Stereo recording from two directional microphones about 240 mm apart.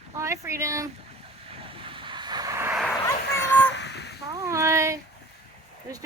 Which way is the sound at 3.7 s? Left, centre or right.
Left.